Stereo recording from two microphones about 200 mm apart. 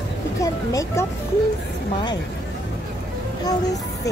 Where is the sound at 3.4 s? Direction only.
15° left (ahead or behind).